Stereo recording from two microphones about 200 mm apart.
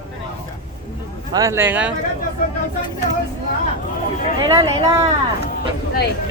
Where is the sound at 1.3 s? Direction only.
15° right (ahead or behind).